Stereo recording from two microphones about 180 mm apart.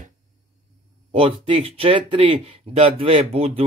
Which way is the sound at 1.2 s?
30° right (ahead or behind).